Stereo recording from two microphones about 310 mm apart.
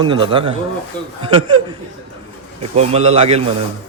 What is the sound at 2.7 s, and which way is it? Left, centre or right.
Speech, centre.